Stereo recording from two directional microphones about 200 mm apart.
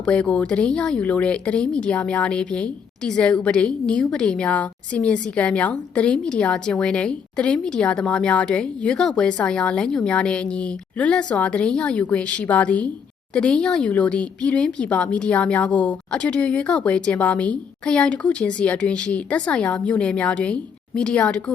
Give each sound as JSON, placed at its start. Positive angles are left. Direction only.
{"t": 0.0, "sound": "speech", "side_deg": 5}